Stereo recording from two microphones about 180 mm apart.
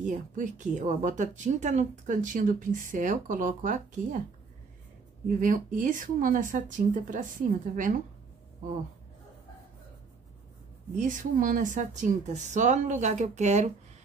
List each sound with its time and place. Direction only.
0.0 s speech: 45° right (ahead or behind)
5.4 s speech: 45° right (ahead or behind)
11.0 s speech: 45° right (ahead or behind)